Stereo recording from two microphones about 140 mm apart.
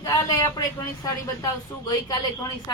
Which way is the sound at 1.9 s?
30° left (ahead or behind).